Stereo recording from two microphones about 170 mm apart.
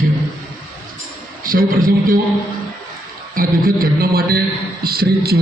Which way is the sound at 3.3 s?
60° right (ahead or behind).